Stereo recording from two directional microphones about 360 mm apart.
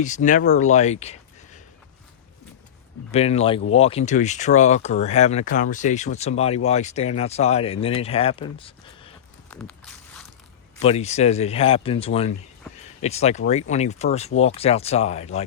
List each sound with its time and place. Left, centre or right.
0.0 s speech: left
3.1 s speech: centre
9.5 s walk: centre
10.8 s speech: centre